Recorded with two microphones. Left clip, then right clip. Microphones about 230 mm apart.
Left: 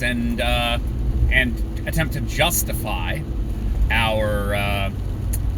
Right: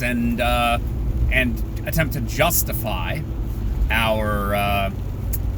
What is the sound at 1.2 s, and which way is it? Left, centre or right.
Speech, centre.